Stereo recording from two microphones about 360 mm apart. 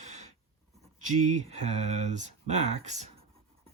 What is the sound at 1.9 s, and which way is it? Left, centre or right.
Speech, centre.